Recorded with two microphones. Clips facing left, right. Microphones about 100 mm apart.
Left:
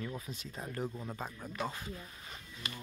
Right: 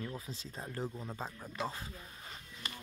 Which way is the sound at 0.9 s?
Centre (ahead or behind).